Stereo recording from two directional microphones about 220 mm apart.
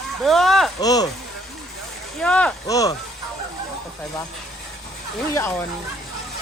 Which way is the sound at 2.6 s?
15° left (ahead or behind).